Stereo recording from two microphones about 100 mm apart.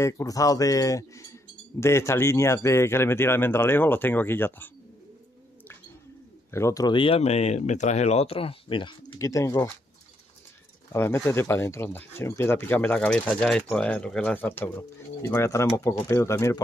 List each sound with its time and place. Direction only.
0.0 s speech: 35° left (ahead or behind)
6.5 s speech: 30° left (ahead or behind)
6.8 s speech: 55° left (ahead or behind)
9.2 s speech: 30° left (ahead or behind)
10.9 s speech: 25° left (ahead or behind)